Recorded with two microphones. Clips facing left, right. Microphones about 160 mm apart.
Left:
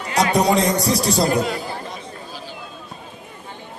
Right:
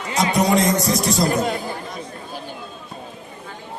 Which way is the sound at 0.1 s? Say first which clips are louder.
Left 1 dB; 35° left (ahead or behind).